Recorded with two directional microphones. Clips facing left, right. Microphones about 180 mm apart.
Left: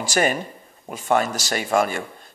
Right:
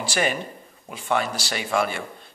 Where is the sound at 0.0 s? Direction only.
45° left (ahead or behind).